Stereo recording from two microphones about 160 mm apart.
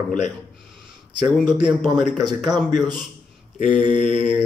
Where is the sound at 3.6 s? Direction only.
55° left (ahead or behind).